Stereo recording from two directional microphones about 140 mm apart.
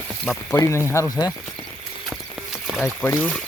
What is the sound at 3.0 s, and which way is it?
Speech, 15° left (ahead or behind).